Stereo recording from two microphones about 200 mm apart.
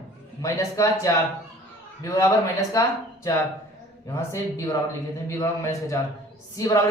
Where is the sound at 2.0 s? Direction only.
15° left (ahead or behind).